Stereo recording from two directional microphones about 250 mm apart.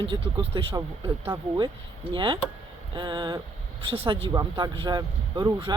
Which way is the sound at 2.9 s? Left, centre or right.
Centre.